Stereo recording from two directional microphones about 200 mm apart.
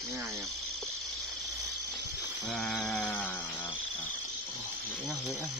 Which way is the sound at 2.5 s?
5° left (ahead or behind).